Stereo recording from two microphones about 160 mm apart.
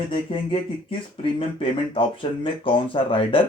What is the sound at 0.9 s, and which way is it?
Speech, 35° left (ahead or behind).